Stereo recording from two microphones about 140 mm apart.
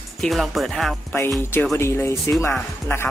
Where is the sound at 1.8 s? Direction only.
20° left (ahead or behind).